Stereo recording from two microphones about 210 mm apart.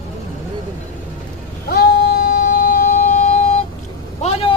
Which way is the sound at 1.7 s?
45° left (ahead or behind).